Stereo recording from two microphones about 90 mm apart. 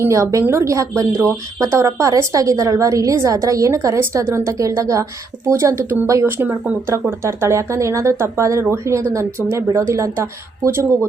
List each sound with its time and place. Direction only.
0.1 s a woman's voice: 35° right (ahead or behind)